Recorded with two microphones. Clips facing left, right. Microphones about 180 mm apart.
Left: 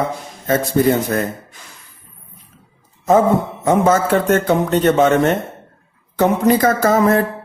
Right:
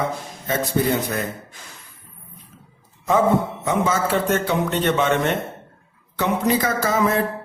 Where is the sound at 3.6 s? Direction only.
50° left (ahead or behind).